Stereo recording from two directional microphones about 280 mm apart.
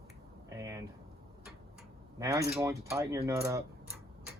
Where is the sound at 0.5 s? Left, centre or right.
Centre.